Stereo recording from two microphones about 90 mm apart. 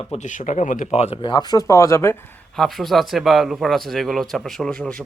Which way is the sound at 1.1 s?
60° left (ahead or behind).